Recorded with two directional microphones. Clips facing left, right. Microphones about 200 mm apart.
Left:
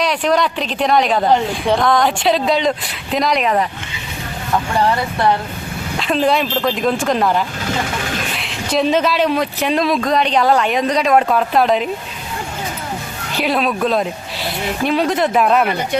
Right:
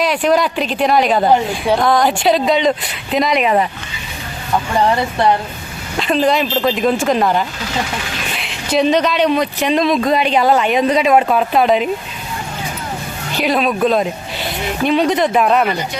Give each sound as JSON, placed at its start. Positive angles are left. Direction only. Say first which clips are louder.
{"t": 0.0, "sound": "a woman's voice", "louder": "right 2 dB", "side_deg": 0}
{"t": 6.0, "sound": "a woman's voice", "louder": "right 2 dB", "side_deg": 0}
{"t": 7.7, "sound": "vehicle", "louder": "left 1 dB", "side_deg": 50}
{"t": 8.3, "sound": "a woman's voice", "louder": "right 1 dB", "side_deg": 0}
{"t": 13.3, "sound": "a woman's voice", "louder": "right 2 dB", "side_deg": 0}